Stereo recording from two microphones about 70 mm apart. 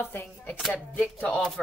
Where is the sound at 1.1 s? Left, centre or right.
Left.